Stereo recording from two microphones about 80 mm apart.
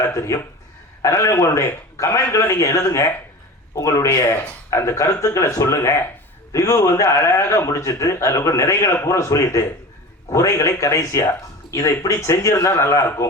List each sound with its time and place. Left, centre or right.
0.1 s a man's voice: left